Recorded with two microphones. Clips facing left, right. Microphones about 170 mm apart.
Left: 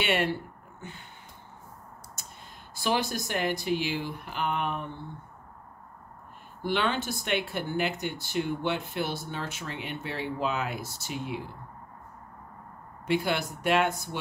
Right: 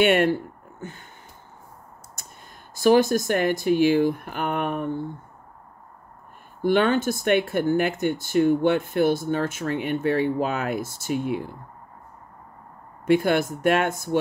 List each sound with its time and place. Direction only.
0.0 s speech: 50° right (ahead or behind)
2.7 s speech: 45° right (ahead or behind)
6.6 s speech: 50° right (ahead or behind)
13.0 s speech: 50° right (ahead or behind)